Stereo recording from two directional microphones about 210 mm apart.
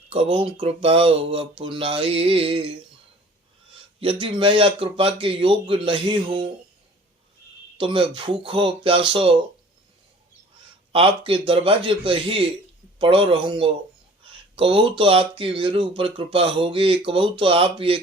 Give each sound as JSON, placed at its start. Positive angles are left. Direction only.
{"t": 0.1, "sound": "speech", "side_deg": -25}
{"t": 4.0, "sound": "speech", "side_deg": -25}
{"t": 7.8, "sound": "speech", "side_deg": -25}
{"t": 10.9, "sound": "speech", "side_deg": -25}